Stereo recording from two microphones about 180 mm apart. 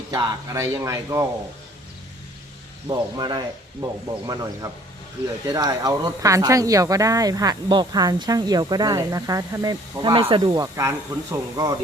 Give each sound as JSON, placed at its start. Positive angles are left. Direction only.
{"t": 0.1, "sound": "speech", "side_deg": -20}
{"t": 2.9, "sound": "speech", "side_deg": -25}